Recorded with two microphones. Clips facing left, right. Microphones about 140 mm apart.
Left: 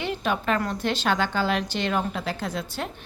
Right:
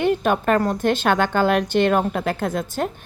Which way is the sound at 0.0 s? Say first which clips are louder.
Right 8 dB; 50° right (ahead or behind).